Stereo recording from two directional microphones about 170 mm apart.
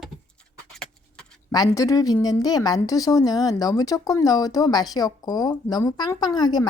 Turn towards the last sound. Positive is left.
turn(degrees=25)  # may be behind; listen again after turning